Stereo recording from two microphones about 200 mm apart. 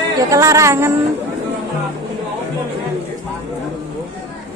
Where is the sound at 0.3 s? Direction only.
15° right (ahead or behind).